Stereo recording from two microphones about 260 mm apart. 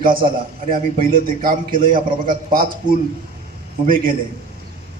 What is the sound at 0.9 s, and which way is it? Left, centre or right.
A man's voice, right.